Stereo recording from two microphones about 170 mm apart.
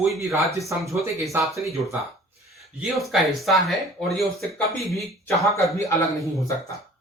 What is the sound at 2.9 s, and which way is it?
Speech, centre (ahead or behind).